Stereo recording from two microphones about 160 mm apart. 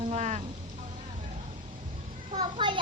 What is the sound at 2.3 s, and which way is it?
Speech, 30° right (ahead or behind).